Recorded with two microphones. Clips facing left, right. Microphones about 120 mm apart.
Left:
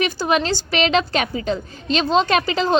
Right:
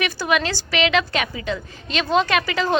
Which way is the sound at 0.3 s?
35° left (ahead or behind).